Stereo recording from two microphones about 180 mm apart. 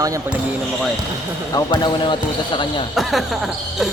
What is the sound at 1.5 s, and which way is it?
Speech, 20° left (ahead or behind).